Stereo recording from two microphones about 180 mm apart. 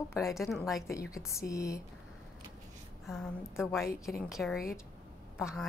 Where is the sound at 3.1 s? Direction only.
Centre (ahead or behind).